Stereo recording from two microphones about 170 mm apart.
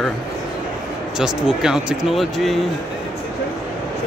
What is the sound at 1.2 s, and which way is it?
A man's voice, 5° right (ahead or behind).